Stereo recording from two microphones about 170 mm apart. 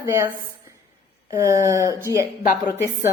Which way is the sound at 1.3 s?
15° right (ahead or behind).